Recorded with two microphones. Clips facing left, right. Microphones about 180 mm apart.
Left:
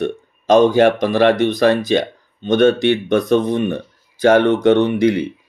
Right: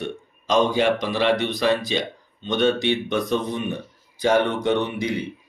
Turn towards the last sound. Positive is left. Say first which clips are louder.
# left 9 dB
turn(degrees=70)  # may be behind; listen again after turning